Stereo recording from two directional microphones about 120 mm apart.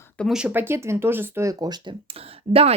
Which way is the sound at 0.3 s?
10° right (ahead or behind).